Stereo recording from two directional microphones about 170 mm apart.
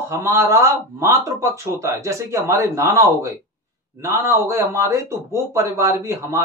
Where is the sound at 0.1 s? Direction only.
15° right (ahead or behind).